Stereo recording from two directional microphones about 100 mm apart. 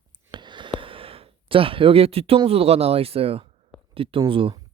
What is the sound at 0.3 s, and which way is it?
Gasp, 50° right (ahead or behind).